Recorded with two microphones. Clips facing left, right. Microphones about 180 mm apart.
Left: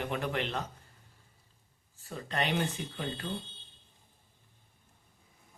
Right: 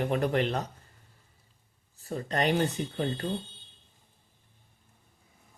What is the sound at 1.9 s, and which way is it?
Speech, 40° right (ahead or behind).